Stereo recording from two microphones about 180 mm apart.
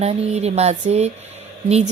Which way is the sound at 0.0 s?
35° right (ahead or behind).